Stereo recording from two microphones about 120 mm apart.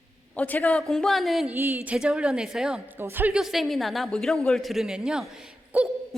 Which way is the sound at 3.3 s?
Centre (ahead or behind).